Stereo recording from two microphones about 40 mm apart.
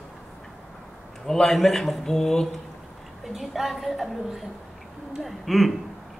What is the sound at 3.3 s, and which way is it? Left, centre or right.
Speech, centre.